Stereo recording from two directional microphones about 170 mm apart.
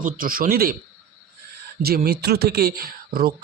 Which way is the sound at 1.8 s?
65° right (ahead or behind).